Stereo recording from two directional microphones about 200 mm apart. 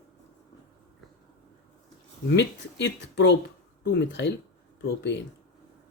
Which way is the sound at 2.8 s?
60° left (ahead or behind).